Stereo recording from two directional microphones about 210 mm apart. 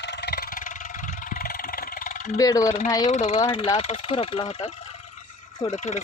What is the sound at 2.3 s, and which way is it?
Speech, 15° left (ahead or behind).